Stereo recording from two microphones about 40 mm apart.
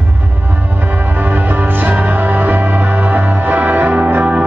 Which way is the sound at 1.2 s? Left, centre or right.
Right.